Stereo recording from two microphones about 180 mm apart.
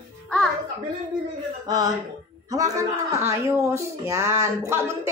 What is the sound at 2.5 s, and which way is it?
A man's voice, 20° right (ahead or behind).